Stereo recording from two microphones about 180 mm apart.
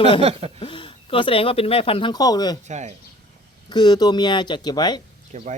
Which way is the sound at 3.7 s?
25° left (ahead or behind).